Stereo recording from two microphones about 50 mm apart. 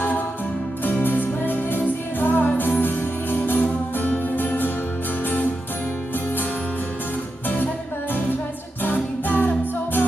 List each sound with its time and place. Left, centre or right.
1.0 s music: left
7.4 s music: left